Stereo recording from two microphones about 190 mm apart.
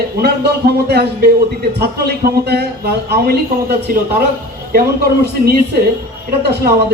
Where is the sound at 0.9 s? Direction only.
55° right (ahead or behind).